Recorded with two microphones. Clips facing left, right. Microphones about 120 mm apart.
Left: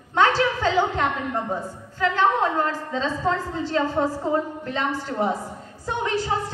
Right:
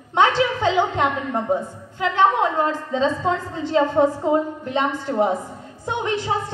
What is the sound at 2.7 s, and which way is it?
A woman's voice, 20° right (ahead or behind).